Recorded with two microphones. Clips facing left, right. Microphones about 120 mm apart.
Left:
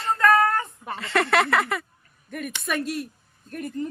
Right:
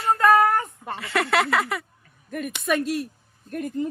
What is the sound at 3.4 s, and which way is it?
Speech, 15° right (ahead or behind).